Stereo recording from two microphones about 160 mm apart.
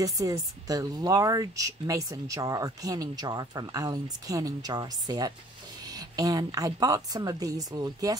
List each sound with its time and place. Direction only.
0.0 s speech: 20° right (ahead or behind)